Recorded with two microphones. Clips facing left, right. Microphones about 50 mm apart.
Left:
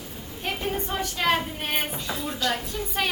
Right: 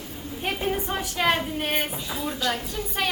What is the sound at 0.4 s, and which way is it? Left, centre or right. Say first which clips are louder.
A woman's voice: right 2 dB; centre.